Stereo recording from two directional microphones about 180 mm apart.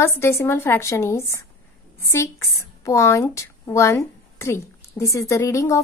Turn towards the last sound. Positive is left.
turn(degrees=15)  # may be behind; listen again after turning